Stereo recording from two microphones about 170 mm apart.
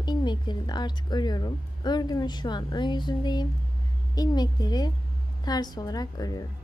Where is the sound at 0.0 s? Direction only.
25° left (ahead or behind).